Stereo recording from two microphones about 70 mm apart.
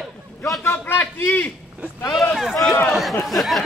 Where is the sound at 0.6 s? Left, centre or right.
Left.